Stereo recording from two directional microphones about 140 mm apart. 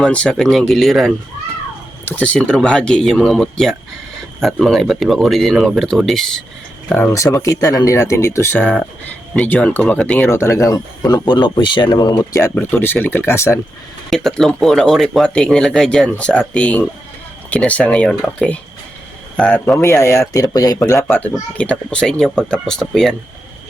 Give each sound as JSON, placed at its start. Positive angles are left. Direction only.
{"t": 0.0, "sound": "speech", "side_deg": 10}
{"t": 7.1, "sound": "speech", "side_deg": 25}
{"t": 14.1, "sound": "speech", "side_deg": 0}